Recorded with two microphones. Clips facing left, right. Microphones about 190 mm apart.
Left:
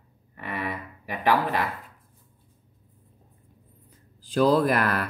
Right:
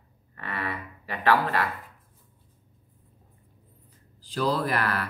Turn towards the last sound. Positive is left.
turn(degrees=45)  # may be behind; listen again after turning